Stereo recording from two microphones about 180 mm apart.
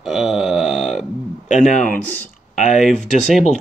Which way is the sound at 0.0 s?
Centre (ahead or behind).